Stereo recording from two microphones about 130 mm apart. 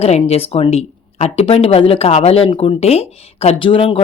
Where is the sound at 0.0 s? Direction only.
50° left (ahead or behind).